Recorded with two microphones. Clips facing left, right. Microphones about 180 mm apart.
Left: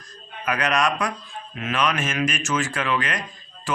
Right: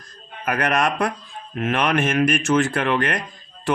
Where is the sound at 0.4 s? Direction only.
55° right (ahead or behind).